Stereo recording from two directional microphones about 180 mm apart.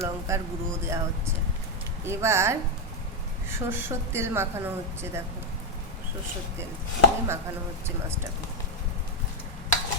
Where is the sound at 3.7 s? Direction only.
10° right (ahead or behind).